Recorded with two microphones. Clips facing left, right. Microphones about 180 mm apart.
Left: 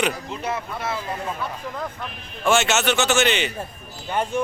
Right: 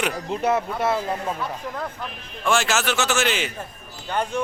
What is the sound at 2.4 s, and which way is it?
A man's voice, centre (ahead or behind).